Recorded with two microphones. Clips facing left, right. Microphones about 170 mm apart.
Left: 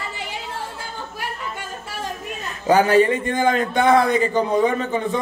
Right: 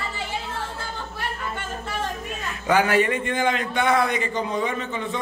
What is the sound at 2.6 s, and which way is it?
A man's voice, 35° left (ahead or behind).